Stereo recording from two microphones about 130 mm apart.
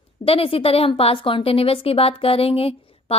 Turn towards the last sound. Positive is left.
turn(degrees=50)  # may be behind; listen again after turning